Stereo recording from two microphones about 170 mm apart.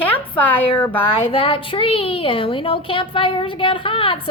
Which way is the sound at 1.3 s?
35° left (ahead or behind).